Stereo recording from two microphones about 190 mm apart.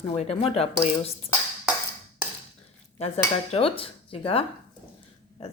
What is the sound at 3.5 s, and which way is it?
Speech, 30° left (ahead or behind).